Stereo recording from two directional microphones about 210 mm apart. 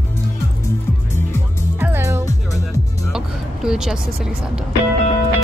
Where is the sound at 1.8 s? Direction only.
10° right (ahead or behind).